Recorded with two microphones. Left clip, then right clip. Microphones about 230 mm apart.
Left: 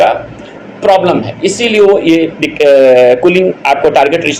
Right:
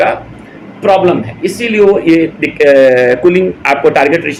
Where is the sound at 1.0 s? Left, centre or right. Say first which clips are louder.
Left 1 dB; centre.